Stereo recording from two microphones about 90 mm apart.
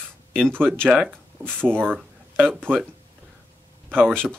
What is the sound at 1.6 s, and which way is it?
Speech, 20° right (ahead or behind).